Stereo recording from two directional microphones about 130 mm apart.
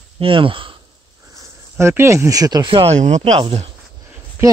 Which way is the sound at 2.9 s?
60° right (ahead or behind).